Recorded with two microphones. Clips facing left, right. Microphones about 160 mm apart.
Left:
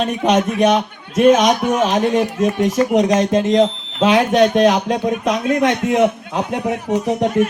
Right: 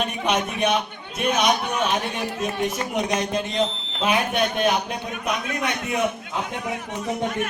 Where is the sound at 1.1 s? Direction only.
90° left.